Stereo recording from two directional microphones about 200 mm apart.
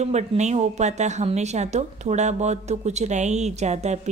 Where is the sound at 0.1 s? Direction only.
35° right (ahead or behind).